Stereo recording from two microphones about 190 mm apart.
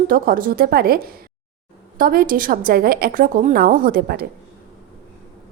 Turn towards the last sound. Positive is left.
turn(degrees=-50)  # may be behind; listen again after turning